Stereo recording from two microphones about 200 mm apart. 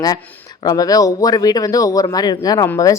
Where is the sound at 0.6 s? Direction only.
20° left (ahead or behind).